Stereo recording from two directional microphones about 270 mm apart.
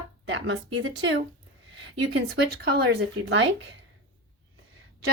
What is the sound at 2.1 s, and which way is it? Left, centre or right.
A woman's voice, right.